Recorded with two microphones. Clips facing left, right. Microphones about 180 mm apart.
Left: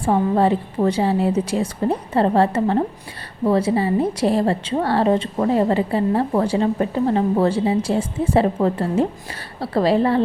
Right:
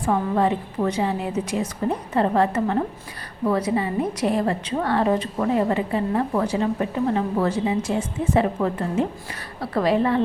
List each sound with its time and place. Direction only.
0.0 s a woman's voice: 30° left (ahead or behind)